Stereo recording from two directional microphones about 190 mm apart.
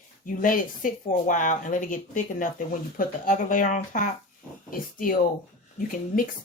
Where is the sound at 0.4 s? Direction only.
45° left (ahead or behind).